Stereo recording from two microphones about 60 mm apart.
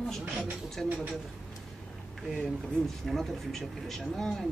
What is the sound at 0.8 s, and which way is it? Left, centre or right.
Speech, centre.